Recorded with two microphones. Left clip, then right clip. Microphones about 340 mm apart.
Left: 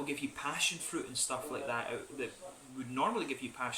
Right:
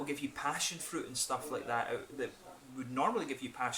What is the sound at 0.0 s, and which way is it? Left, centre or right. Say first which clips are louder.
Speech: right 1 dB; centre.